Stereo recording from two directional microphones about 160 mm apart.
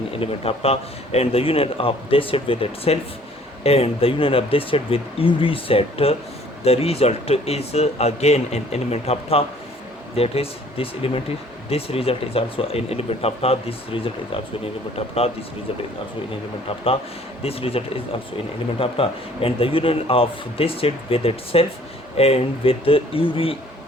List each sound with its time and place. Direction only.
0.1 s speech: 35° left (ahead or behind)
16.6 s speech: 35° left (ahead or behind)